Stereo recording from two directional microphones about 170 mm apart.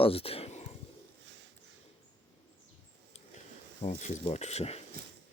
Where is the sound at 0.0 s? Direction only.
35° left (ahead or behind).